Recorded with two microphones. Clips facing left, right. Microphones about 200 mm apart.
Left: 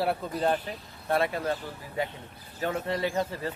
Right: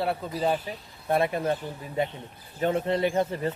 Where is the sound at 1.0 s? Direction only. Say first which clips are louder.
Right 2 dB; 20° right (ahead or behind).